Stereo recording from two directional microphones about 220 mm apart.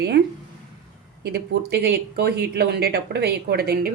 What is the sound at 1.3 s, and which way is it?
Speech, 45° right (ahead or behind).